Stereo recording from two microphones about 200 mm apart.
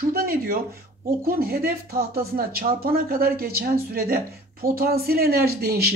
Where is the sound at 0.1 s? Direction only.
50° right (ahead or behind).